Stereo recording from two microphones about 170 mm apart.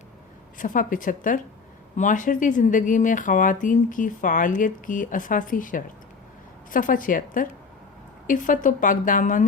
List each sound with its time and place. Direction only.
0.6 s speech: 50° left (ahead or behind)